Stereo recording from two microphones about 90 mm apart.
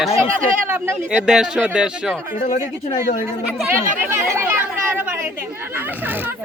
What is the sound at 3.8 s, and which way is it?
Speech, 30° right (ahead or behind).